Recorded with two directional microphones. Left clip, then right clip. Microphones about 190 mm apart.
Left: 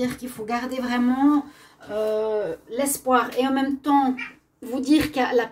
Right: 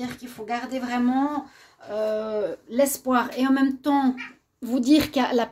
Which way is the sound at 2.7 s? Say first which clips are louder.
Left 1 dB; 60° right (ahead or behind).